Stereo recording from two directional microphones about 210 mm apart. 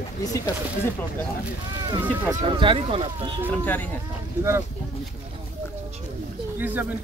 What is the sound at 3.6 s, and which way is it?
Speech, 10° left (ahead or behind).